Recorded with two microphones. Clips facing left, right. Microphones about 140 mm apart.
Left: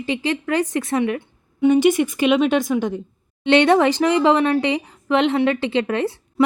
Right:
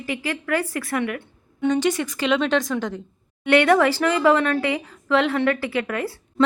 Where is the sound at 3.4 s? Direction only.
25° left (ahead or behind).